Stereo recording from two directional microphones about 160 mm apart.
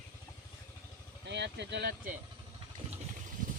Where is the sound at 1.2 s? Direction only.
90° right.